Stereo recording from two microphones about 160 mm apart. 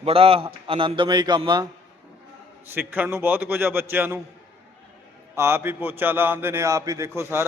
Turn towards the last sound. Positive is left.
turn(degrees=-15)  # may be behind; listen again after turning